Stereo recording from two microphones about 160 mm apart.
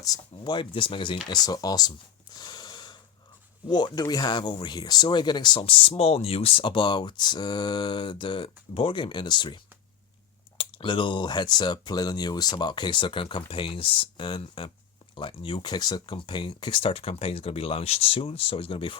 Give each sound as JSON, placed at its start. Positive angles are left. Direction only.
{"t": 0.0, "sound": "speech", "side_deg": 25}
{"t": 2.4, "sound": "a sound", "side_deg": 25}
{"t": 3.7, "sound": "speech", "side_deg": 25}
{"t": 10.6, "sound": "speech", "side_deg": 30}